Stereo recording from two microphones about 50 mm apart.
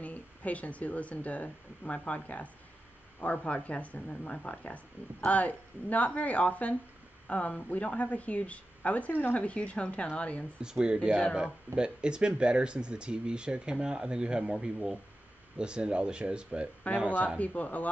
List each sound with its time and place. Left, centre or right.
0.0 s speech: left
10.6 s speech: centre
16.8 s speech: left